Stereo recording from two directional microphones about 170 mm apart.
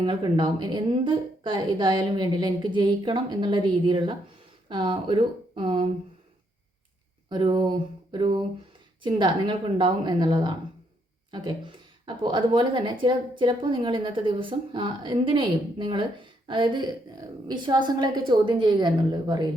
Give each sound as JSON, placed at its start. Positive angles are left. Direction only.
{"t": 0.0, "sound": "speech", "side_deg": -25}
{"t": 7.3, "sound": "speech", "side_deg": -25}